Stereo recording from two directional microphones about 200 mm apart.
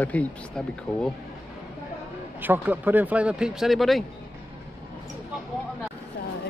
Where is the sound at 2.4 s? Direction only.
10° right (ahead or behind).